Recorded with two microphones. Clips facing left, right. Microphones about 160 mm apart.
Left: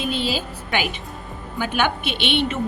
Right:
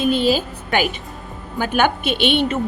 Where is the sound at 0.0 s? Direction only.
45° right (ahead or behind).